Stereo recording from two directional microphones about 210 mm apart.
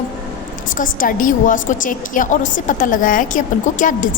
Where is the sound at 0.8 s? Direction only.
40° left (ahead or behind).